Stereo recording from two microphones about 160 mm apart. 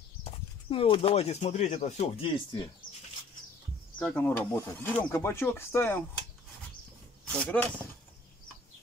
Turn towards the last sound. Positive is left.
turn(degrees=10)  # may be behind; listen again after turning